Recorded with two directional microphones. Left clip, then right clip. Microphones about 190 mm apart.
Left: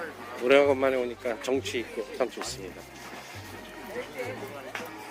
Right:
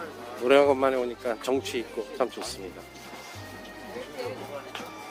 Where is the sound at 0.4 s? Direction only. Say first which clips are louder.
Right 1 dB; 10° right (ahead or behind).